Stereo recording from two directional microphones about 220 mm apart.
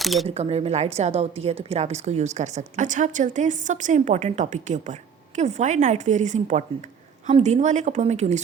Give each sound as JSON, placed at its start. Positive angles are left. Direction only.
{"t": 0.0, "sound": "speech", "side_deg": 0}
{"t": 0.3, "sound": "a woman's voice", "side_deg": -30}